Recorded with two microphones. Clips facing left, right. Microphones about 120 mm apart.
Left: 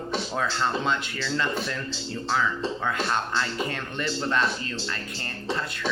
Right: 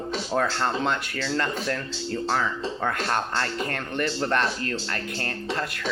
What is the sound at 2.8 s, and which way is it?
Speech, 55° right (ahead or behind).